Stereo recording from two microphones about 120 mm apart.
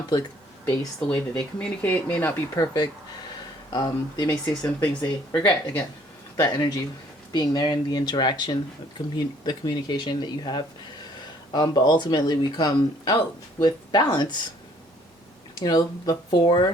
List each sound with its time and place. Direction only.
1.1 s speech: 10° left (ahead or behind)
2.6 s speech: 35° left (ahead or behind)
4.3 s speech: 10° left (ahead or behind)
6.4 s speech: 35° left (ahead or behind)
15.6 s speech: 35° left (ahead or behind)